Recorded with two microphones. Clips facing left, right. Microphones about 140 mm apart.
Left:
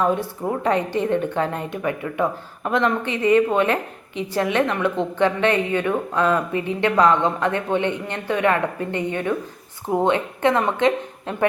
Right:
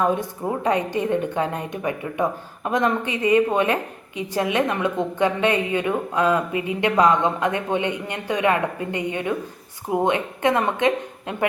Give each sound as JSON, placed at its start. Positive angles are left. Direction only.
{"t": 0.0, "sound": "a woman's voice", "side_deg": -15}